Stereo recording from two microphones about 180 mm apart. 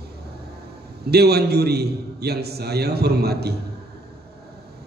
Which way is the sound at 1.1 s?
60° right (ahead or behind).